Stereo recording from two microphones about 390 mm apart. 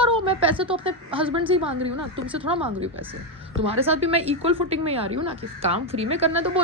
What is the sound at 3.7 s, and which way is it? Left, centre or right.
A woman's voice, centre.